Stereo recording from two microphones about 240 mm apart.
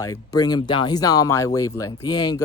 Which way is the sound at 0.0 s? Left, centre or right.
Centre.